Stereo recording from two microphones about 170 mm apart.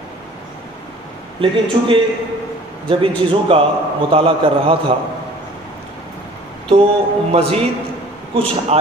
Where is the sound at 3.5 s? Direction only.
30° right (ahead or behind).